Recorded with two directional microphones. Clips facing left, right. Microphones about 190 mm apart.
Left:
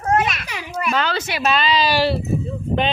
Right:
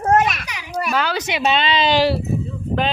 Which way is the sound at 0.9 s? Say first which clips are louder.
Right 1 dB; 10° right (ahead or behind).